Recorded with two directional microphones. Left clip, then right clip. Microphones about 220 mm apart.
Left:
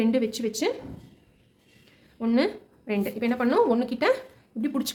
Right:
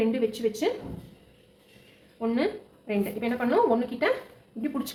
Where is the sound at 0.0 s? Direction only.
50° left (ahead or behind).